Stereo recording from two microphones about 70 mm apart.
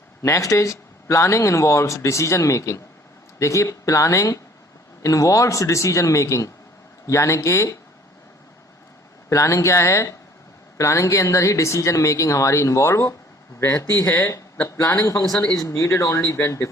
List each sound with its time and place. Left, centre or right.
0.2 s speech: left
9.3 s speech: left